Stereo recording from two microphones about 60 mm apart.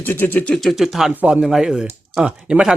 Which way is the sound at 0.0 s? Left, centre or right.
Left.